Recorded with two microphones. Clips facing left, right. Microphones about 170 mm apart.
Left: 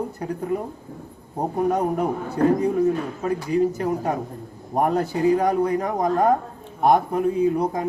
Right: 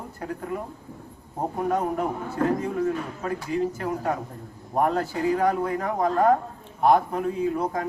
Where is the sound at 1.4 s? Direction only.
20° left (ahead or behind).